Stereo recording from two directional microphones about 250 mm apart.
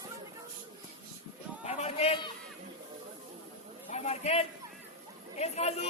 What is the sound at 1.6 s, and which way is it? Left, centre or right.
Speech, left.